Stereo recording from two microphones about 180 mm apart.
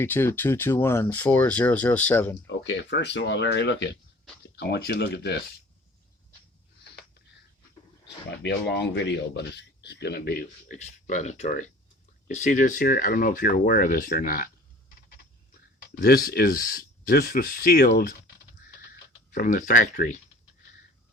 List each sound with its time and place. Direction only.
0.0 s speech: 10° left (ahead or behind)
2.5 s speech: 85° left; by 5.4 s 65° left (ahead or behind)
8.0 s speech: 70° left (ahead or behind)
10.8 s speech: 40° left (ahead or behind)
16.0 s speech: 55° left (ahead or behind)
19.3 s speech: 50° left (ahead or behind)